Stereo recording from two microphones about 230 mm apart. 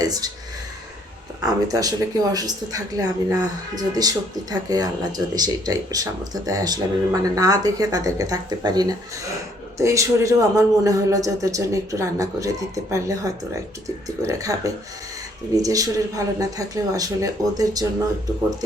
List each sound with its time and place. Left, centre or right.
0.0 s speech: centre
1.4 s speech: centre